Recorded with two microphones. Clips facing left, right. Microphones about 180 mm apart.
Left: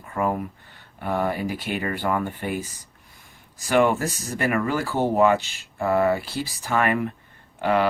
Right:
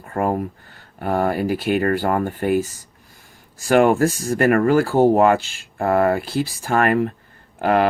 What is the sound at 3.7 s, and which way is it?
Speech, 45° right (ahead or behind).